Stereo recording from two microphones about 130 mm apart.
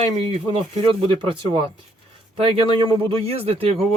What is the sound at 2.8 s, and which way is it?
Speech, 40° right (ahead or behind).